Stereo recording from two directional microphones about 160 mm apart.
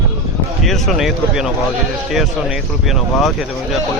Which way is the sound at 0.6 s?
Centre (ahead or behind).